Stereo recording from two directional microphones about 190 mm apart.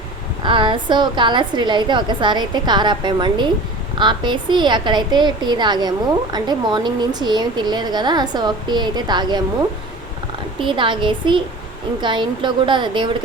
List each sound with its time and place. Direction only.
0.4 s a woman's voice: 25° right (ahead or behind)